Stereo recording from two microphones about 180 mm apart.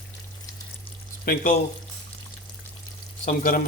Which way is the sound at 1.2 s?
55° left (ahead or behind).